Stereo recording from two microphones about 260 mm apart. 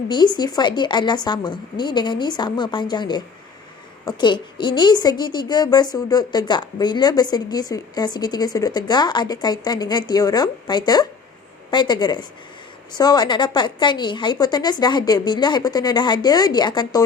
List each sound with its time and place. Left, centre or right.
0.1 s a woman's voice: centre